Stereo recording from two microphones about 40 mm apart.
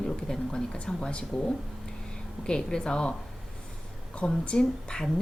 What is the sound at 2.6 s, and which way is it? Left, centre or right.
Speech, centre.